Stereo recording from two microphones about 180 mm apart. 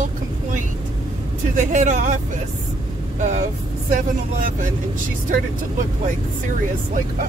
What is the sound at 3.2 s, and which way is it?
Speech, 45° right (ahead or behind).